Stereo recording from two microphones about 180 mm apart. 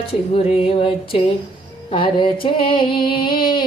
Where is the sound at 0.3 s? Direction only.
30° left (ahead or behind).